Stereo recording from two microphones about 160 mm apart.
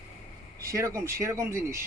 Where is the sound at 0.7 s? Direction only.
20° right (ahead or behind).